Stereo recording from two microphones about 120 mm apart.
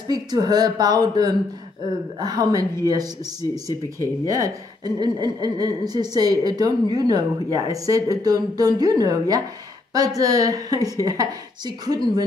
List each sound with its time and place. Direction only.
0.1 s a woman's voice: 35° right (ahead or behind)
4.3 s a woman's voice: 30° right (ahead or behind)